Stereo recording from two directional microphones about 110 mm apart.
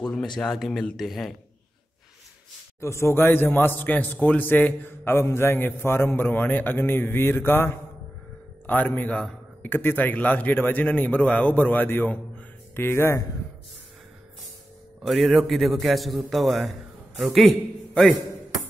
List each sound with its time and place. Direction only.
0.4 s a man's voice: 5° left (ahead or behind)
2.8 s a man's voice: 25° left (ahead or behind)
15.0 s a man's voice: centre (ahead or behind)